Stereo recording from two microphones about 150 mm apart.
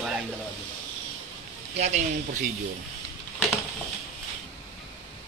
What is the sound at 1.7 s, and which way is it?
Speech, 50° right (ahead or behind).